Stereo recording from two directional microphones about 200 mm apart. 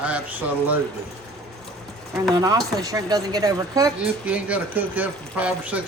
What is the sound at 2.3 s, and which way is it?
Speech, 20° right (ahead or behind).